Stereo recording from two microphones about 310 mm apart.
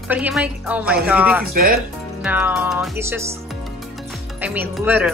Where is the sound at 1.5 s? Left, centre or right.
Right.